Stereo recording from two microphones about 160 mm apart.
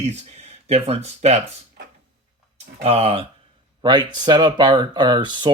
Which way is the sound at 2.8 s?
40° right (ahead or behind).